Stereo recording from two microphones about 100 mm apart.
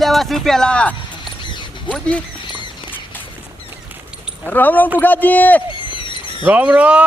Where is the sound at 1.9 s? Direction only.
10° left (ahead or behind).